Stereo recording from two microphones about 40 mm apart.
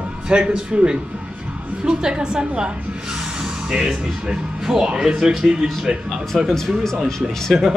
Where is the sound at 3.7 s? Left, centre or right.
Centre.